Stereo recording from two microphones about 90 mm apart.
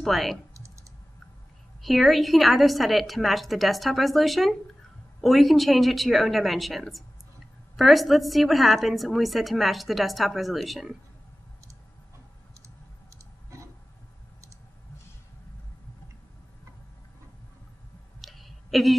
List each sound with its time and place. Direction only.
0.0 s a woman's voice: centre (ahead or behind)
1.8 s a woman's voice: centre (ahead or behind)
13.5 s a sound: 35° right (ahead or behind)
18.2 s clicking: centre (ahead or behind)